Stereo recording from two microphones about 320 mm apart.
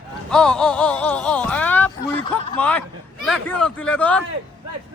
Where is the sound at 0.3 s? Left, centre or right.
Centre.